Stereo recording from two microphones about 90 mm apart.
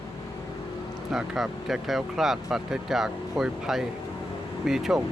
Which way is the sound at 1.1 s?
Centre (ahead or behind).